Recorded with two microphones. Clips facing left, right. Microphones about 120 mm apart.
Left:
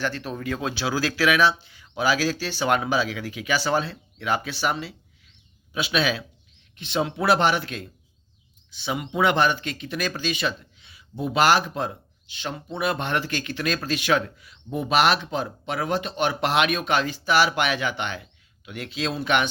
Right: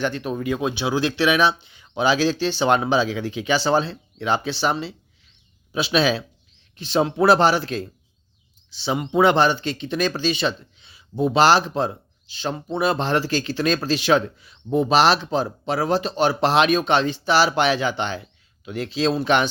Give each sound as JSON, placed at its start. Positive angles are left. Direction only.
{"t": 0.0, "sound": "speech", "side_deg": -20}